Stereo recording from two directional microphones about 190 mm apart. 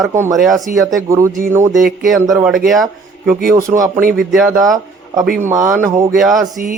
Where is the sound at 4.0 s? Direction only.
50° right (ahead or behind).